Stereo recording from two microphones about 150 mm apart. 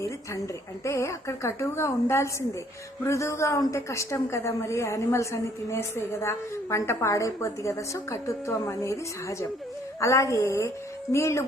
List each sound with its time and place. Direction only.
0.9 s a woman's voice: 20° left (ahead or behind)
10.0 s a woman's voice: 20° left (ahead or behind)